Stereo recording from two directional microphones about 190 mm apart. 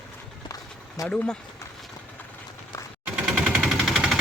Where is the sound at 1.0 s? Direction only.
5° left (ahead or behind).